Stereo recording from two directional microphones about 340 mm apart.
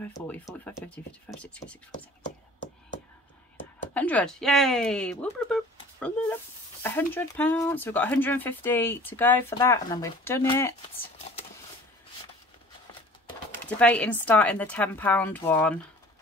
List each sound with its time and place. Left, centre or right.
0.0 s speech: centre
3.9 s speech: centre
13.7 s speech: centre